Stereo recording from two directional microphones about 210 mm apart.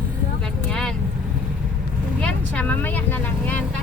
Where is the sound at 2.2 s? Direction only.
5° left (ahead or behind).